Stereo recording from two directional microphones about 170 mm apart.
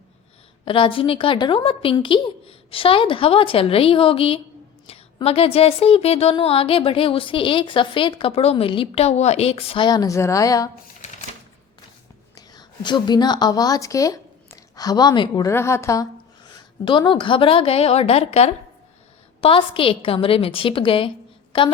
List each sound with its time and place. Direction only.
0.6 s speech: 30° left (ahead or behind)
12.3 s a woman's voice: 25° left (ahead or behind)
16.8 s speech: 30° left (ahead or behind)